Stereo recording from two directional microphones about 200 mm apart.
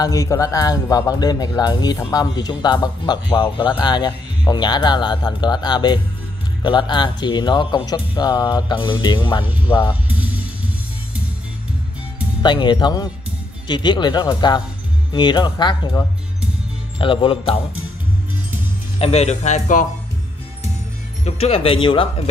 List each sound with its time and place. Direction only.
0.0 s speech: 15° left (ahead or behind)
10.0 s music: 5° right (ahead or behind)
12.4 s speech: 20° left (ahead or behind)
18.9 s speech: 30° left (ahead or behind)
21.2 s speech: 30° left (ahead or behind)